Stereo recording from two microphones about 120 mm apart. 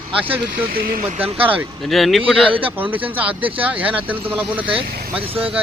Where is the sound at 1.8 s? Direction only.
Centre (ahead or behind).